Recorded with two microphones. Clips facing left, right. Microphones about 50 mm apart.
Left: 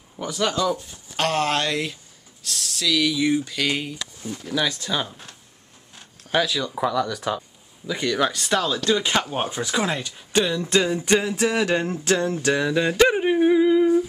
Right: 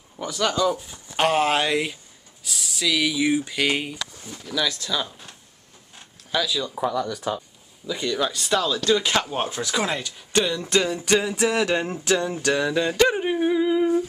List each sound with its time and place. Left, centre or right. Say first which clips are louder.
0.2 s speech: even; centre
1.1 s speech: right 2 dB; centre
4.2 s speech: left 2 dB; left
6.3 s speech: left 2 dB; left
6.8 s speech: left 3 dB; left
7.8 s speech: left 2 dB; left
8.5 s speech: even; left
8.8 s speech: even; centre
9.5 s speech: left 1 dB; centre
10.7 s a sound: left 1 dB; centre
12.6 s speech: left 1 dB; centre
13.1 s yodeling: left 4 dB; centre
13.7 s humming: left 3 dB; centre